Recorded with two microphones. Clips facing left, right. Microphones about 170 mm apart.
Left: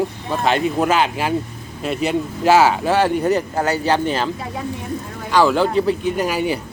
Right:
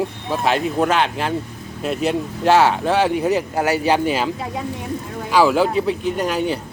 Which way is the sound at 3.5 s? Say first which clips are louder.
Right 1 dB; 10° right (ahead or behind).